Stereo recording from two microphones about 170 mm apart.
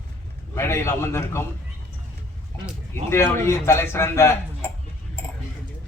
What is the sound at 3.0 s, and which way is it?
A man's voice, 15° left (ahead or behind).